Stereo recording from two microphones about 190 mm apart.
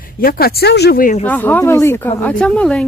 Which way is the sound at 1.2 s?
10° left (ahead or behind).